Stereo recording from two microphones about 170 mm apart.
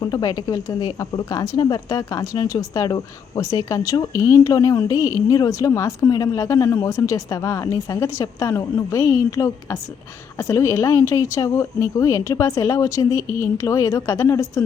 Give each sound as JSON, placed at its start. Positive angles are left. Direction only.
{"t": 0.0, "sound": "speech", "side_deg": 20}